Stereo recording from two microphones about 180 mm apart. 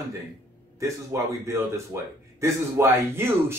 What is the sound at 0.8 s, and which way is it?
Speech, 15° right (ahead or behind).